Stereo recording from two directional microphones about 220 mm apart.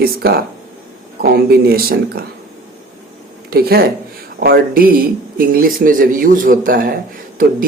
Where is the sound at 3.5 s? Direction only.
45° right (ahead or behind).